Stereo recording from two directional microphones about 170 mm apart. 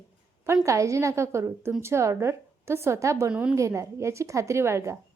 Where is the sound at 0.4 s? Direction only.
15° right (ahead or behind).